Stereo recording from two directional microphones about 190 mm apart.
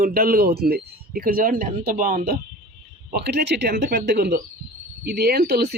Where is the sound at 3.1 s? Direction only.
60° right (ahead or behind).